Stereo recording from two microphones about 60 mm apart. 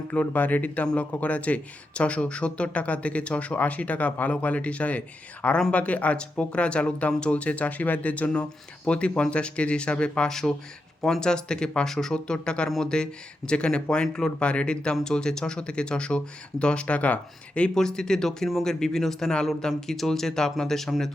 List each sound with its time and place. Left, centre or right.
0.1 s speech: left
17.7 s speech: centre